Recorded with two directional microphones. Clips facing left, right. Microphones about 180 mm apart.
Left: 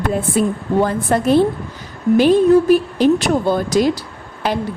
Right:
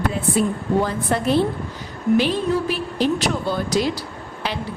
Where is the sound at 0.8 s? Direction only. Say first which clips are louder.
Left 5 dB; 45° left (ahead or behind).